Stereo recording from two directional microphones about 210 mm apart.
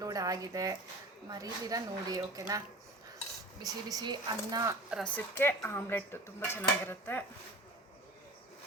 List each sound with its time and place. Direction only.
0.0 s speech: 15° right (ahead or behind)
3.8 s speech: 20° right (ahead or behind)
4.9 s speech: centre (ahead or behind)